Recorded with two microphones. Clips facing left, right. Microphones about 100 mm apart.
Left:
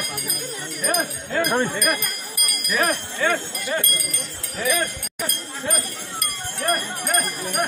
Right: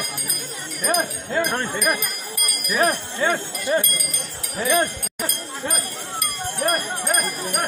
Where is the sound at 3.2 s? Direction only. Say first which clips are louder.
Even; 20° right (ahead or behind).